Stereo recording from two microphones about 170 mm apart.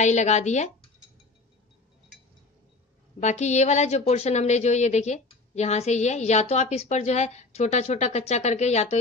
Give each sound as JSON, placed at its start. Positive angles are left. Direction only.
{"t": 0.0, "sound": "speech", "side_deg": 45}
{"t": 3.2, "sound": "a woman's voice", "side_deg": 40}